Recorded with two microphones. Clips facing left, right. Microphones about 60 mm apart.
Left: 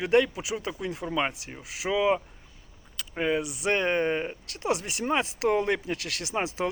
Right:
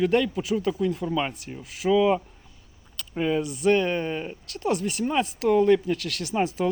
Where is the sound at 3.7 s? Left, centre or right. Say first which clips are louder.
Right 3 dB; left.